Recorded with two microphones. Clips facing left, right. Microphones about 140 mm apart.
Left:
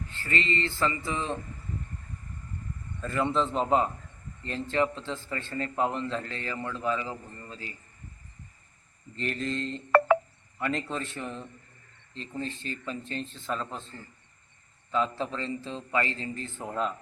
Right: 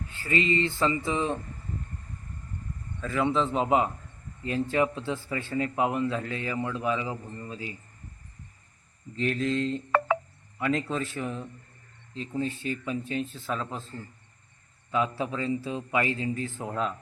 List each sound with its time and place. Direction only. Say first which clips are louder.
0.1 s a man's voice: right 4 dB; 10° right (ahead or behind)
3.0 s a man's voice: right 1 dB; centre (ahead or behind)
9.1 s a man's voice: right 5 dB; centre (ahead or behind)